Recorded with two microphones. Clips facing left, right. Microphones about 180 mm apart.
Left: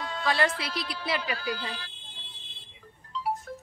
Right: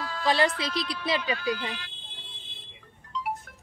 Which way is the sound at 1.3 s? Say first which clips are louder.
Right 3 dB; 35° left (ahead or behind).